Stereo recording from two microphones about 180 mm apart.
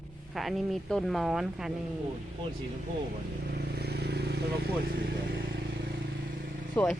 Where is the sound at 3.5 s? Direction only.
60° right (ahead or behind).